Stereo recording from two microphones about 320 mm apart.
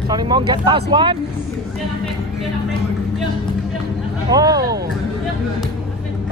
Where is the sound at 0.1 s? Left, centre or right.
Centre.